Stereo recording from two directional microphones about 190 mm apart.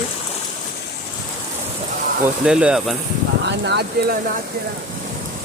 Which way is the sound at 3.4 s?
65° right (ahead or behind).